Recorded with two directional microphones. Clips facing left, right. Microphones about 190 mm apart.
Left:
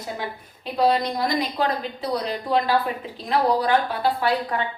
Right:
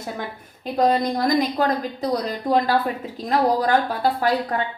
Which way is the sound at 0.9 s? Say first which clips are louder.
Right 3 dB; 45° right (ahead or behind).